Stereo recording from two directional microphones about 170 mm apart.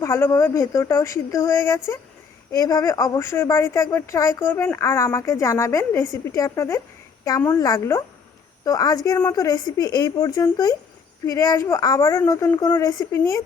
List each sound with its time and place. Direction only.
0.0 s a woman's voice: 15° left (ahead or behind)